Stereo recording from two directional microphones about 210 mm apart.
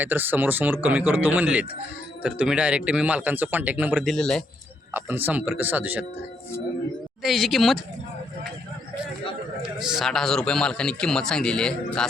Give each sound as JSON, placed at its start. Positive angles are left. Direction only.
{"t": 0.0, "sound": "a man's voice", "side_deg": -10}
{"t": 4.9, "sound": "speech", "side_deg": -10}
{"t": 7.2, "sound": "a man's voice", "side_deg": 0}
{"t": 9.6, "sound": "a man's voice", "side_deg": 0}